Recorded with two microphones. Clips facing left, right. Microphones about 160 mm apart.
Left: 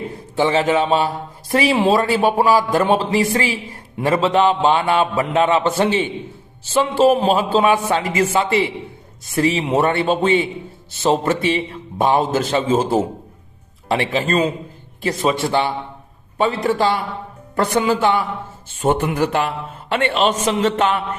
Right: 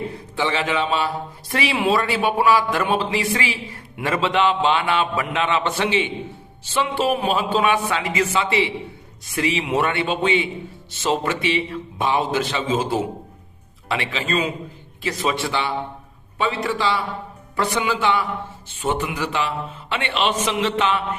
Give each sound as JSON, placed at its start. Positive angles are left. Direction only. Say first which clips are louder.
{"t": 0.3, "sound": "a man's voice", "louder": "left 6 dB", "side_deg": 40}